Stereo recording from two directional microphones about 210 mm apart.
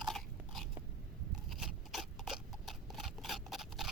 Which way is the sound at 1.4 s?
Centre (ahead or behind).